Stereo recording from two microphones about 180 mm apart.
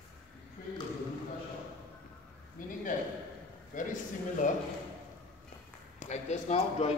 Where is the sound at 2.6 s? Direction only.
50° left (ahead or behind).